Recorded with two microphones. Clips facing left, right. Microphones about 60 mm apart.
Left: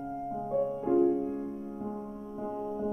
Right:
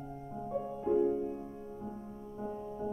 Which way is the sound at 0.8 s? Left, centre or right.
Left.